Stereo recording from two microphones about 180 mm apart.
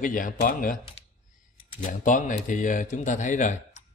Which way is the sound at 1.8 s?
45° left (ahead or behind).